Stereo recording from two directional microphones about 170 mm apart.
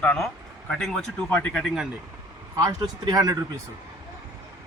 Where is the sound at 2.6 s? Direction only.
25° right (ahead or behind).